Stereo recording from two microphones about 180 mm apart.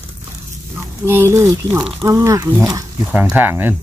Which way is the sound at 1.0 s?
15° right (ahead or behind).